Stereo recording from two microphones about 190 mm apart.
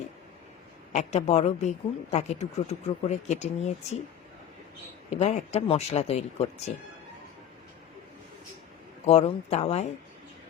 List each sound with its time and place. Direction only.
0.9 s a woman's voice: 35° left (ahead or behind)
5.1 s a woman's voice: 35° left (ahead or behind)
9.0 s a woman's voice: 35° left (ahead or behind)